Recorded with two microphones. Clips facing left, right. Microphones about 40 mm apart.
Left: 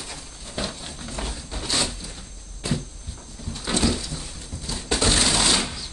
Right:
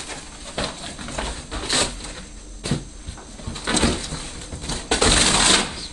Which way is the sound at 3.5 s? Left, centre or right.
Right.